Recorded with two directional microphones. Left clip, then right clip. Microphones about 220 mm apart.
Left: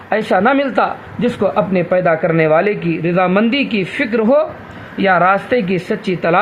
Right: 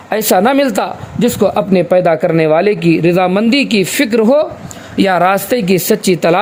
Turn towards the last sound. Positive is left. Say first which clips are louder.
# right 5 dB
turn(degrees=-55)  # may be behind; listen again after turning